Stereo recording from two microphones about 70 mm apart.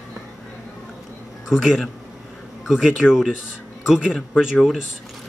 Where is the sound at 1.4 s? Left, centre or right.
Centre.